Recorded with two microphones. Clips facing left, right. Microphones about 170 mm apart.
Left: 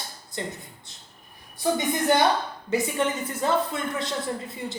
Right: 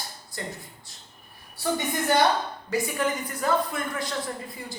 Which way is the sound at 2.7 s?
25° left (ahead or behind).